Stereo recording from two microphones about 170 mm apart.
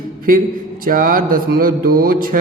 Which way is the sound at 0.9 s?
55° right (ahead or behind).